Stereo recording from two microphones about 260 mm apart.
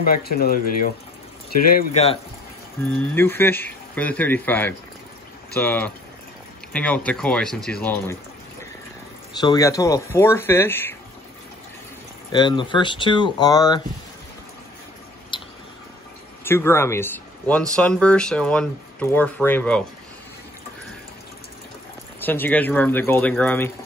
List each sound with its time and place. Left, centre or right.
0.0 s speech: left
2.8 s speech: centre
9.4 s speech: centre
12.3 s speech: centre
15.3 s a sound: centre
16.4 s speech: centre
22.2 s speech: centre